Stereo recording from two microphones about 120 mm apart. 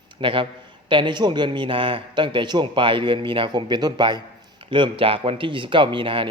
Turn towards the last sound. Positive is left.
turn(degrees=-45)  # may be behind; listen again after turning